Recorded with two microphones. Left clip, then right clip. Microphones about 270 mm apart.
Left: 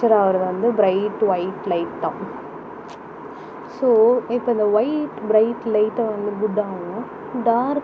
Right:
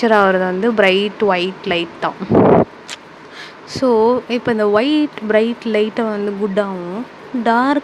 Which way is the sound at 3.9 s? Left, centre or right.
Right.